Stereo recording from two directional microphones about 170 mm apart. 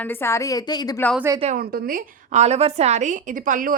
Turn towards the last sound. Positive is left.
turn(degrees=-55)  # may be behind; listen again after turning